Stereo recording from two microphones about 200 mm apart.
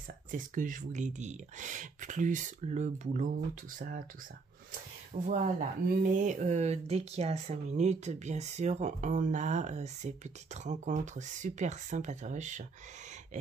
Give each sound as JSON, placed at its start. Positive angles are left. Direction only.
{"t": 0.3, "sound": "speech", "side_deg": -40}
{"t": 5.3, "sound": "speech", "side_deg": -40}